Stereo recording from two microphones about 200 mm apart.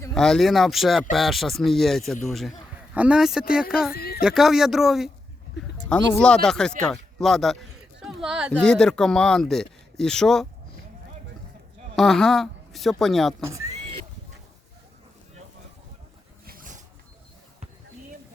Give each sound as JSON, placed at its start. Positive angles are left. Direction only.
{"t": 0.1, "sound": "a man's voice", "side_deg": 0}
{"t": 3.9, "sound": "a sound", "side_deg": 50}
{"t": 4.2, "sound": "a man's voice", "side_deg": 0}
{"t": 11.9, "sound": "speech", "side_deg": 0}
{"t": 13.5, "sound": "speech", "side_deg": -15}
{"t": 16.5, "sound": "zipper", "side_deg": -40}